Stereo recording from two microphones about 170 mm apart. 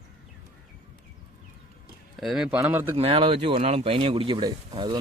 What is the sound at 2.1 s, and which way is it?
Speech, centre (ahead or behind).